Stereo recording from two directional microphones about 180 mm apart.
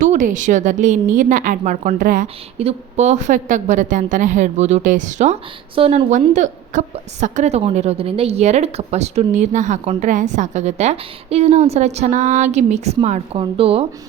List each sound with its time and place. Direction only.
0.0 s a woman's voice: 45° right (ahead or behind)
2.2 s a woman's voice: 35° right (ahead or behind)